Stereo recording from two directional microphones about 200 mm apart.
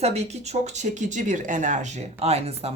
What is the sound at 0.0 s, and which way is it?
Speech, 30° right (ahead or behind).